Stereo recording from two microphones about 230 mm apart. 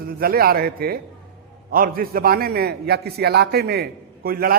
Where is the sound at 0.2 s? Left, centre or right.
Right.